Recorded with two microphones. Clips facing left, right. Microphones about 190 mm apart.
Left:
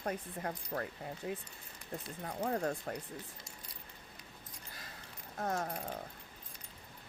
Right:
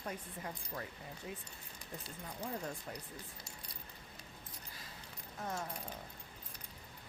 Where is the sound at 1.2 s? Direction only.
65° left (ahead or behind).